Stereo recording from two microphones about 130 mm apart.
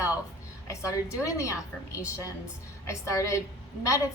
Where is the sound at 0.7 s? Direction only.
25° left (ahead or behind).